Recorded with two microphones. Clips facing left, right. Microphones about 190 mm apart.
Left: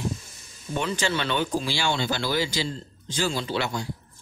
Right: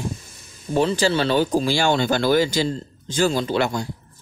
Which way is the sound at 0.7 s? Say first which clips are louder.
Right 8 dB; 35° right (ahead or behind).